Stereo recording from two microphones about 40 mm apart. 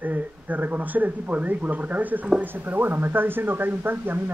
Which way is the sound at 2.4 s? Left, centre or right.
Right.